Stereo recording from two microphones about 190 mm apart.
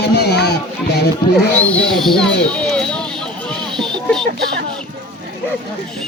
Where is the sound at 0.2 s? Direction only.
60° left (ahead or behind).